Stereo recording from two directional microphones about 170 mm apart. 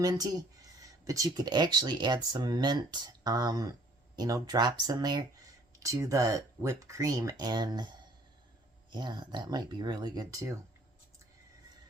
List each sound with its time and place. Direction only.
0.0 s speech: 20° right (ahead or behind)
8.9 s speech: 25° right (ahead or behind)